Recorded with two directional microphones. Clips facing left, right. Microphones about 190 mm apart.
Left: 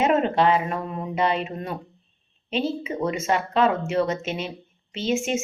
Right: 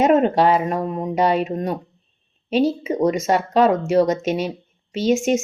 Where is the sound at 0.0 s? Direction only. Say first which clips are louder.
Right 5 dB; 40° right (ahead or behind).